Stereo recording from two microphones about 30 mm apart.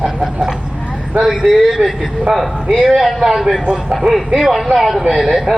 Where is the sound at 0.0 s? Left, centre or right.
Right.